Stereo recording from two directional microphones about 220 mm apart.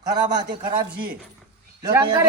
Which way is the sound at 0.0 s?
20° right (ahead or behind).